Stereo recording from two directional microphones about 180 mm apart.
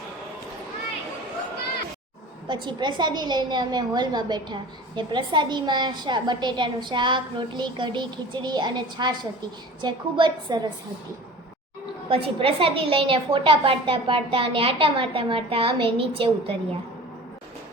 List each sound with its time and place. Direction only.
2.5 s a woman's voice: 25° right (ahead or behind)
12.0 s a woman's voice: 30° right (ahead or behind)